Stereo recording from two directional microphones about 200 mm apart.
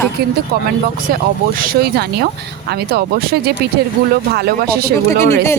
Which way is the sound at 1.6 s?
55° right (ahead or behind).